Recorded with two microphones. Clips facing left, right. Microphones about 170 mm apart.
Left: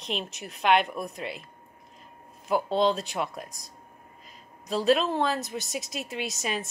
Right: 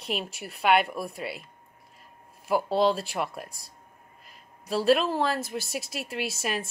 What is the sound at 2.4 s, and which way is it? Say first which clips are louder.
A woman's voice: right 1 dB; 5° right (ahead or behind).